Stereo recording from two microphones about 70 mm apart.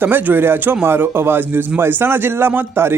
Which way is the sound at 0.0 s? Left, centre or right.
Right.